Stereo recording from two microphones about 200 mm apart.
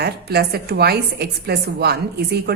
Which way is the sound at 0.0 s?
50° right (ahead or behind).